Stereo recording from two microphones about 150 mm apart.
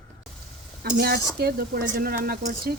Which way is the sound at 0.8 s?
90° right.